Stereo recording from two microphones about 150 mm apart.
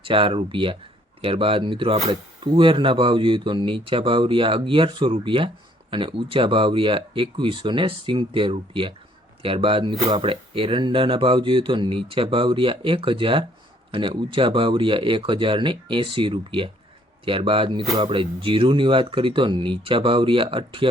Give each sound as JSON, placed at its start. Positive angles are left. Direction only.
{"t": 0.0, "sound": "speech", "side_deg": -35}